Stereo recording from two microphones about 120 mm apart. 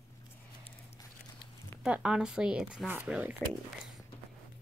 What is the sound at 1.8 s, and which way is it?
Speech, 10° right (ahead or behind).